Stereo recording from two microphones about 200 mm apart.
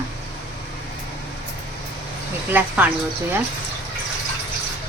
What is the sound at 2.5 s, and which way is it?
Speech, 10° right (ahead or behind).